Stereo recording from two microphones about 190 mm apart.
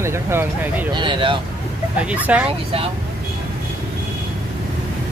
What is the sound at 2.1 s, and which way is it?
Speech, 10° right (ahead or behind).